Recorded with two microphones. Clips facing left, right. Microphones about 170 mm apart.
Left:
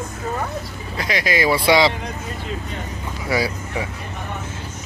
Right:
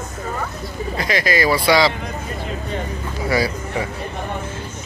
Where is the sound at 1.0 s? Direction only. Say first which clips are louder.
Right 1 dB; 10° left (ahead or behind).